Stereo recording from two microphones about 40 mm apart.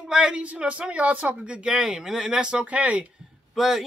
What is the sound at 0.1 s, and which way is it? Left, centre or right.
A man's voice, right.